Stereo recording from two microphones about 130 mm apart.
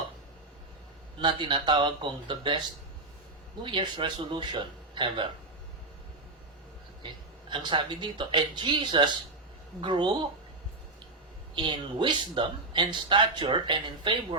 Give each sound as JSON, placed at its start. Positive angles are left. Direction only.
{"t": 1.2, "sound": "speech", "side_deg": -35}
{"t": 3.6, "sound": "speech", "side_deg": -40}
{"t": 7.5, "sound": "speech", "side_deg": -40}
{"t": 11.5, "sound": "speech", "side_deg": -35}